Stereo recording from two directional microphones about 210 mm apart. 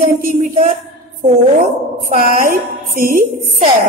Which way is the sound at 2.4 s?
40° right (ahead or behind).